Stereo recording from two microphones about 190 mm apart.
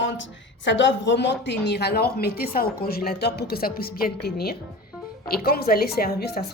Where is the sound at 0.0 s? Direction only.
70° left (ahead or behind).